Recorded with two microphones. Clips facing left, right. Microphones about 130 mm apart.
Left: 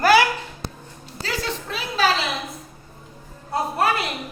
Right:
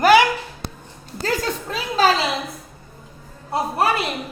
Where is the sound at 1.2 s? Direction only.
45° right (ahead or behind).